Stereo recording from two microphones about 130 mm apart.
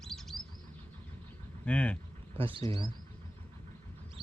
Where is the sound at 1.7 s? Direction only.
10° left (ahead or behind).